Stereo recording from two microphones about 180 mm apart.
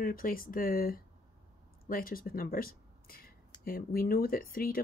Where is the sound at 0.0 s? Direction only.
50° left (ahead or behind).